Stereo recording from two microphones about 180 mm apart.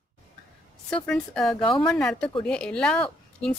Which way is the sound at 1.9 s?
5° left (ahead or behind).